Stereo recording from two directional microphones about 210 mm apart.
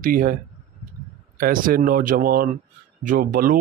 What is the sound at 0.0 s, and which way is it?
Speech, 40° right (ahead or behind).